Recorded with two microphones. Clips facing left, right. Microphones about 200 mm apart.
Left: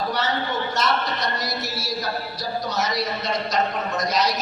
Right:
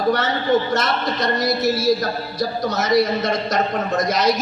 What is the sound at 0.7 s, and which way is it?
A man's voice, 50° right (ahead or behind).